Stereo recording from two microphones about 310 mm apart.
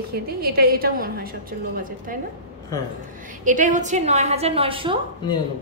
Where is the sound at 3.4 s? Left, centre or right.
Right.